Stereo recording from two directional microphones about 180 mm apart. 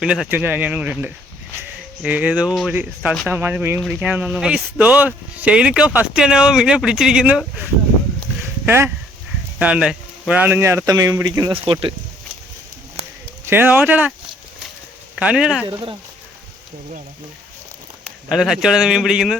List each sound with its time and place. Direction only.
0.0 s speech: 5° right (ahead or behind); by 11.9 s 30° right (ahead or behind)
13.4 s speech: 10° right (ahead or behind)
15.1 s speech: 5° right (ahead or behind)
15.6 s speech: 25° right (ahead or behind)
18.3 s speech: centre (ahead or behind)